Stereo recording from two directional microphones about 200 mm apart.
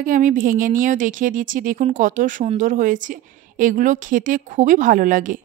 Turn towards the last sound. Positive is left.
turn(degrees=-40)  # may be behind; listen again after turning